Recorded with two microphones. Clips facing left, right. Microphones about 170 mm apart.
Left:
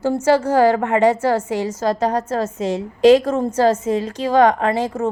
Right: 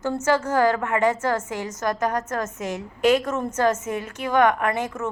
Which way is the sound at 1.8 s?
30° left (ahead or behind).